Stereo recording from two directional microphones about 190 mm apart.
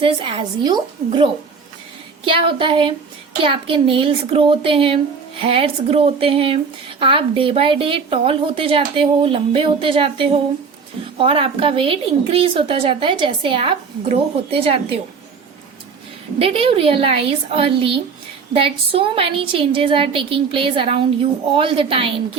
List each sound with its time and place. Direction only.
0.0 s a woman's voice: 25° right (ahead or behind)
16.4 s a woman's voice: 30° right (ahead or behind)